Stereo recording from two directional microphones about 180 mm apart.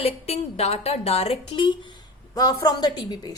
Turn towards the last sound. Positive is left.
turn(degrees=20)  # may be behind; listen again after turning